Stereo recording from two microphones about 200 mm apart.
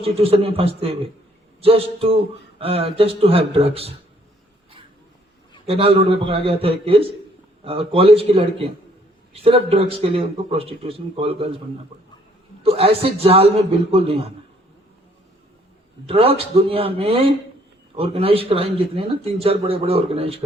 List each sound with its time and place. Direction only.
0.0 s a man's voice: 30° right (ahead or behind)
5.6 s a man's voice: 30° right (ahead or behind)
12.6 s a man's voice: 30° right (ahead or behind)
16.0 s a man's voice: 30° right (ahead or behind)